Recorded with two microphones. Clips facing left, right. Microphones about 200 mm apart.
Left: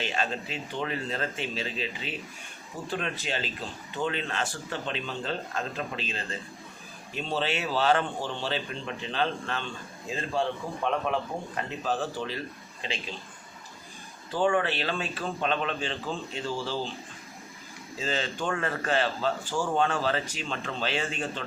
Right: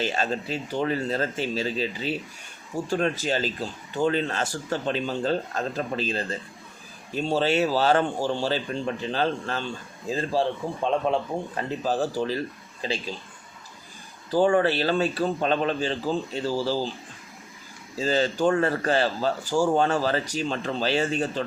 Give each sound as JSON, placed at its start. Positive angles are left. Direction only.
{"t": 0.0, "sound": "a man's voice", "side_deg": -40}
{"t": 14.3, "sound": "a man's voice", "side_deg": -40}
{"t": 17.9, "sound": "a man's voice", "side_deg": -40}